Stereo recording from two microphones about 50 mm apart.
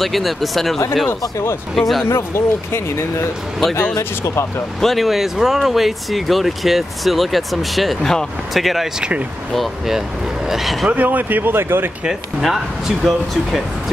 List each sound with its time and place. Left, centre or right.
0.0 s speech: centre
1.8 s speech: centre
2.0 s speech: left
4.7 s speech: centre
10.5 s speech: centre
10.9 s speech: right
12.4 s speech: centre